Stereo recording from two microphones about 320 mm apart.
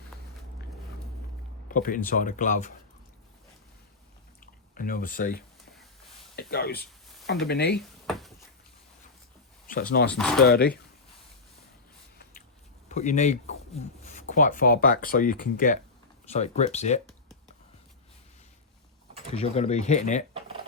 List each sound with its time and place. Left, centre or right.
1.6 s a sound: left
2.0 s speech: left
4.7 s speech: left
7.8 s a sound: centre
10.1 s speech: centre
10.4 s speech: left
12.9 s speech: left
19.3 s speech: centre